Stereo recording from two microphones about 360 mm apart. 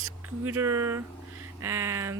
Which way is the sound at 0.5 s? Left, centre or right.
Centre.